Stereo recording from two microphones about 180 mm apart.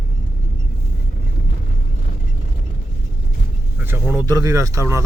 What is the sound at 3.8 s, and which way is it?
Speech, 10° right (ahead or behind).